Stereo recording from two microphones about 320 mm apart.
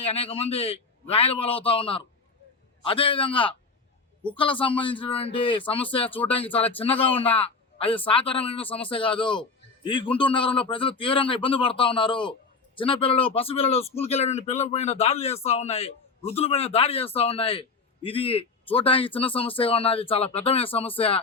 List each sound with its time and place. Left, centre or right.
0.0 s speech: centre